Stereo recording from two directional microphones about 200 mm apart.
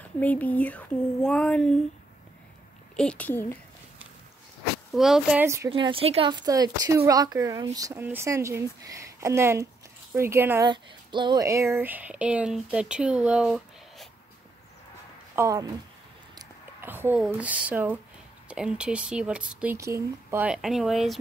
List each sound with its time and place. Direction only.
0.2 s speech: 10° left (ahead or behind)
3.0 s speech: 5° left (ahead or behind)
4.9 s speech: centre (ahead or behind)
5.7 s speech: 25° right (ahead or behind)
10.7 s speech: 25° right (ahead or behind); by 14.0 s 5° right (ahead or behind)
15.3 s speech: 15° right (ahead or behind); by 21.2 s centre (ahead or behind)